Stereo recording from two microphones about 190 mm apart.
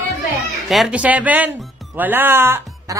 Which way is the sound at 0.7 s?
5° right (ahead or behind).